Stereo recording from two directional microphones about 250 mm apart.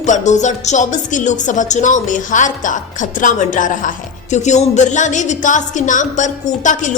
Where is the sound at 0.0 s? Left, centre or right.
Left.